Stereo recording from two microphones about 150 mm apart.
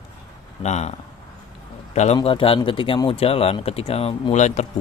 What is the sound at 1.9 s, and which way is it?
Speech, 45° left (ahead or behind).